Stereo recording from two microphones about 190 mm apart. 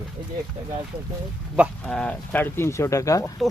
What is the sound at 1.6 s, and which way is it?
Speech, 5° left (ahead or behind).